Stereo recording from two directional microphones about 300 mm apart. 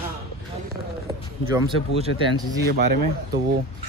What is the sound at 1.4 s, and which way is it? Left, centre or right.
Speech, centre.